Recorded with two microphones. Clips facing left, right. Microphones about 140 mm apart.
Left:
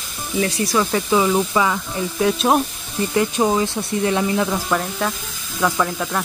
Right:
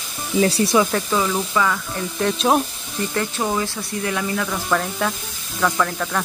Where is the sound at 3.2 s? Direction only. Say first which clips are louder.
Left 5 dB; 20° left (ahead or behind).